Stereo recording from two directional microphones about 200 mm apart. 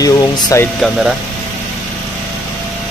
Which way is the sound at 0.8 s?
Centre (ahead or behind).